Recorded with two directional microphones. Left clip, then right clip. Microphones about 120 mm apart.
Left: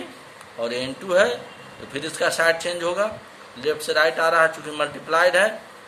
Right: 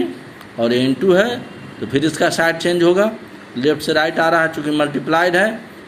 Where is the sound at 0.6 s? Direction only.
30° right (ahead or behind).